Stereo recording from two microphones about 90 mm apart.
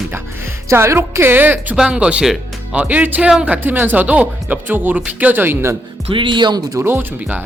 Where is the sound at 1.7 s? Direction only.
10° right (ahead or behind); by 5.7 s 25° right (ahead or behind).